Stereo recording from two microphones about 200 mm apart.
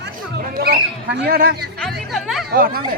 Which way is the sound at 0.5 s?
50° right (ahead or behind).